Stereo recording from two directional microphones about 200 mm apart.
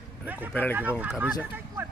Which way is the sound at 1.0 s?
5° right (ahead or behind).